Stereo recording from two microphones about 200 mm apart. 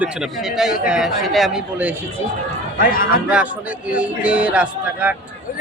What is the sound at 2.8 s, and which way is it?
Speech, 45° left (ahead or behind).